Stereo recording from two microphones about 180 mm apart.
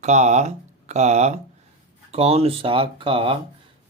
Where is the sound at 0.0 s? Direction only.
40° right (ahead or behind).